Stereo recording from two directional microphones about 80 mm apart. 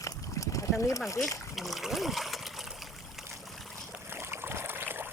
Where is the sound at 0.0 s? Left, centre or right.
Left.